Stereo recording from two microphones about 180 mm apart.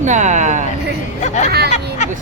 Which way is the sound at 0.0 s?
40° right (ahead or behind).